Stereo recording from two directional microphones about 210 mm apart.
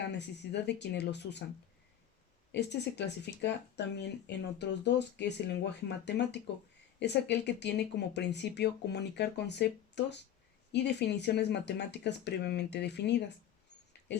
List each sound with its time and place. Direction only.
0.1 s speech: 55° left (ahead or behind)
2.5 s speech: 55° left (ahead or behind)